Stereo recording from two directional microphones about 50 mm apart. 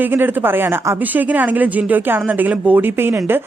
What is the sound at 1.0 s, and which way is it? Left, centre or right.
A woman's voice, right.